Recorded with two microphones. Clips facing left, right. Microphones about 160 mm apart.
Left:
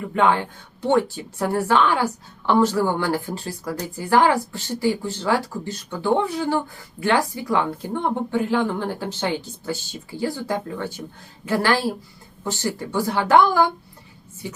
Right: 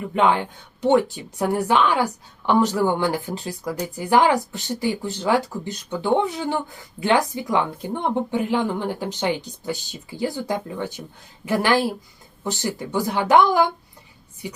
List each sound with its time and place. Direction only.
0.1 s a woman's voice: 20° right (ahead or behind)